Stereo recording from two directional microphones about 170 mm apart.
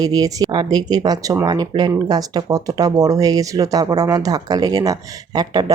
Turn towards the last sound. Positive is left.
turn(degrees=-25)  # may be behind; listen again after turning